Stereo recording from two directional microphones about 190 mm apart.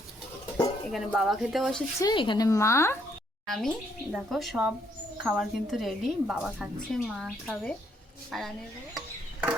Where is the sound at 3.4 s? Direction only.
Centre (ahead or behind).